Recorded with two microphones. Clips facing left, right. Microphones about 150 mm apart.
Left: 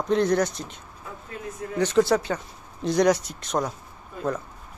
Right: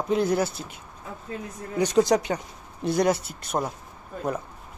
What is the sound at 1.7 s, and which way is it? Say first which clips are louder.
Speech: even; 15° right (ahead or behind).